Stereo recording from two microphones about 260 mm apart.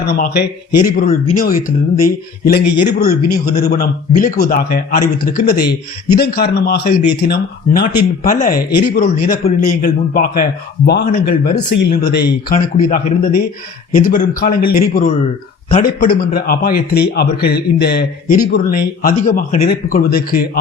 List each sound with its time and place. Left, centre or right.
0.1 s a man's voice: left